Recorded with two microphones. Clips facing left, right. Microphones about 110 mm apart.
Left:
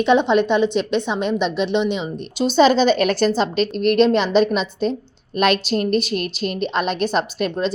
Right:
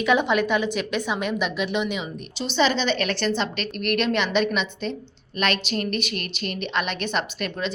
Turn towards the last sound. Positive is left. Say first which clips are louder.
# left 7 dB
turn(degrees=40)  # may be behind; listen again after turning